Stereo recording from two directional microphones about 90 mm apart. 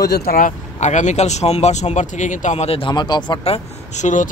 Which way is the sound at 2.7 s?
85° left.